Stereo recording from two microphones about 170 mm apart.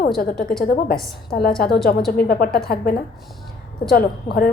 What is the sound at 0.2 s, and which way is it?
A woman's voice, 60° left (ahead or behind).